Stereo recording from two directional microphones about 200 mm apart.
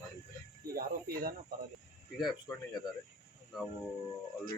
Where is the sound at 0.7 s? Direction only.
45° right (ahead or behind).